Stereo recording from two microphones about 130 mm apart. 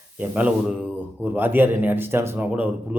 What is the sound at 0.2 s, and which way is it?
A man's voice, 10° right (ahead or behind).